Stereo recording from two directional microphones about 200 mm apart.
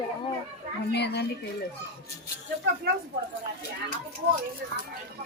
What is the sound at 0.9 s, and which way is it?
Speech, 55° left (ahead or behind).